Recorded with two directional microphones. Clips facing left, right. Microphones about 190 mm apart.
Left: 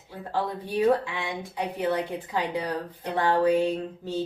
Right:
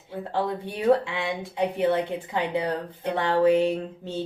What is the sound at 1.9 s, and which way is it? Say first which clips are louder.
Speech: right 2 dB; 25° right (ahead or behind).